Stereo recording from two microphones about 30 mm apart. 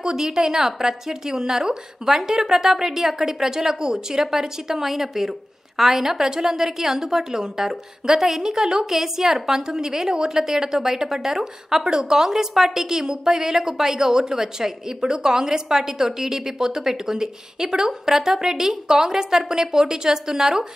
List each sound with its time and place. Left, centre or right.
0.0 s a woman's voice: right
11.9 s a woman's voice: right